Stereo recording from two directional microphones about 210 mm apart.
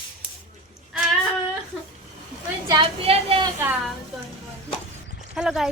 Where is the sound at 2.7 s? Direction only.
25° right (ahead or behind).